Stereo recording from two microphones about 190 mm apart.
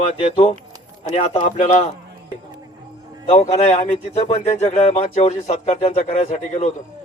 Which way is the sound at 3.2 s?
35° left (ahead or behind).